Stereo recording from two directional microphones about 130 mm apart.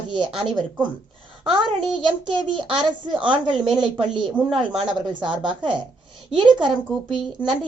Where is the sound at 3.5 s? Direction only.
5° right (ahead or behind).